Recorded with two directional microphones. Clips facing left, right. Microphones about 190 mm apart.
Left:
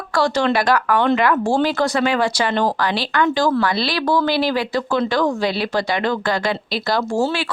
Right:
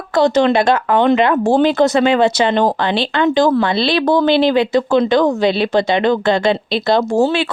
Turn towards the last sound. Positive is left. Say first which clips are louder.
# right 6 dB
turn(degrees=-20)  # may be behind; listen again after turning